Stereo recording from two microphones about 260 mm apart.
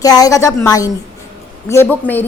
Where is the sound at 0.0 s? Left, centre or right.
Centre.